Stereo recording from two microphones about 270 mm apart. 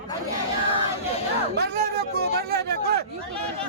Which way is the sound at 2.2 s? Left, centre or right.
Right.